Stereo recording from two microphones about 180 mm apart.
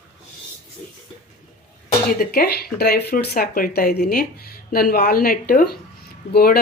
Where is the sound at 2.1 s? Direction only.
55° left (ahead or behind).